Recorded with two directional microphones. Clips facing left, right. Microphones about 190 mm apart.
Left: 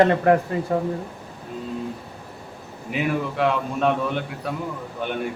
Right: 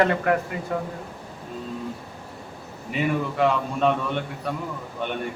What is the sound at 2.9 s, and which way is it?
A man's voice, centre (ahead or behind).